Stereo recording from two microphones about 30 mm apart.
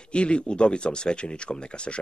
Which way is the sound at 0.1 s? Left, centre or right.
Left.